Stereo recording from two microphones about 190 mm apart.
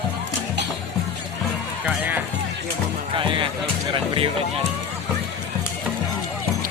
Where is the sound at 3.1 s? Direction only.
25° right (ahead or behind).